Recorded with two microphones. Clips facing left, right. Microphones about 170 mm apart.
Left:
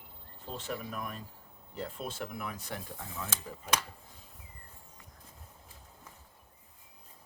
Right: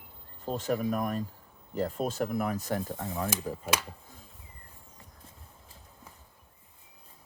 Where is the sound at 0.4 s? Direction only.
45° right (ahead or behind).